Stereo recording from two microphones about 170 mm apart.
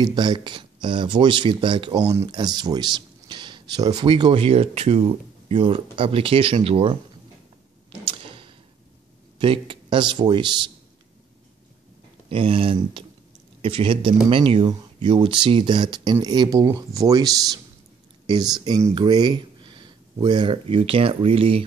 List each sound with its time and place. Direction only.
0.0 s speech: 25° right (ahead or behind)
8.0 s arrow: 30° right (ahead or behind)
9.4 s speech: 30° right (ahead or behind)
12.3 s speech: 30° right (ahead or behind)